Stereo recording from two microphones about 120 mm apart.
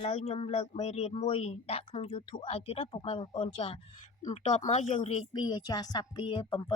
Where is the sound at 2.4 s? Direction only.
50° left (ahead or behind).